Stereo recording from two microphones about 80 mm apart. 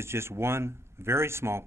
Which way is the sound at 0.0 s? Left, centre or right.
Right.